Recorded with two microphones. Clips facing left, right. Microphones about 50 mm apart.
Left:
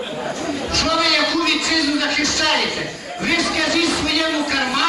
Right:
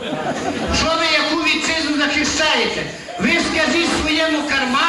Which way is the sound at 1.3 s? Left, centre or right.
Right.